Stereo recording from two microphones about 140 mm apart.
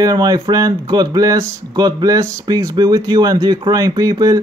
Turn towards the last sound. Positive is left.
turn(degrees=-25)  # may be behind; listen again after turning